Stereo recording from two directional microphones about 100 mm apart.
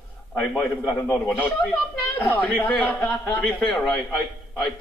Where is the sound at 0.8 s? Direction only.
25° left (ahead or behind).